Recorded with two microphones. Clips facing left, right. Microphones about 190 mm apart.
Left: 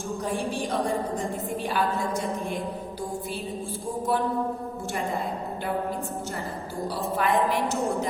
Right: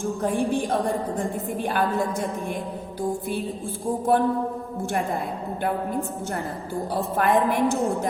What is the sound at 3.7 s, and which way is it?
Speech, 55° right (ahead or behind).